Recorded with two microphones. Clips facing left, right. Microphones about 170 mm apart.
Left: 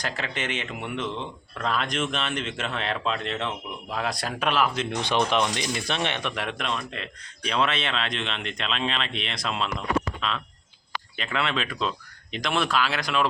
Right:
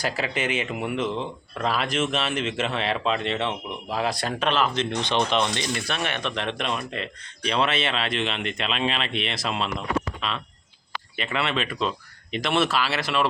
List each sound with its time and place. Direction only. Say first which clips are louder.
0.0 s speech: right 4 dB; 10° right (ahead or behind)
4.4 s speech: even; 10° left (ahead or behind)
6.3 s speech: right 2 dB; 5° left (ahead or behind)